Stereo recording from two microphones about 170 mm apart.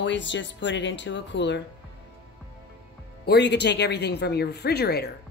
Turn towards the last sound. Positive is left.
turn(degrees=70)  # may be behind; listen again after turning